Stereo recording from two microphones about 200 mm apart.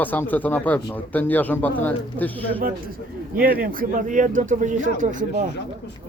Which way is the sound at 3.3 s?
45° right (ahead or behind).